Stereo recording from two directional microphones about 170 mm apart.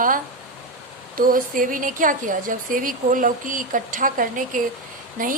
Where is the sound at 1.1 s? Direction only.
55° right (ahead or behind).